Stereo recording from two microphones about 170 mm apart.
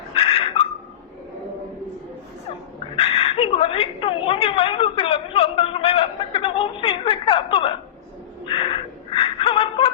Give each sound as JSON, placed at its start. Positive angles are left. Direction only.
{"t": 0.1, "sound": "dog", "side_deg": 30}
{"t": 2.9, "sound": "a sound", "side_deg": 35}
{"t": 8.5, "sound": "gasp", "side_deg": 30}